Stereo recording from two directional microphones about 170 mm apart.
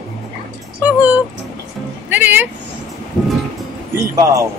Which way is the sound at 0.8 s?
10° right (ahead or behind).